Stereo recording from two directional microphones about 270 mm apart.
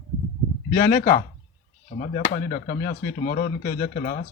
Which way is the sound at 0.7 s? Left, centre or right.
Left.